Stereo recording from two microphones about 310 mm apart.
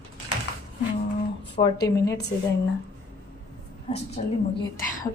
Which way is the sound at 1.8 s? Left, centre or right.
Centre.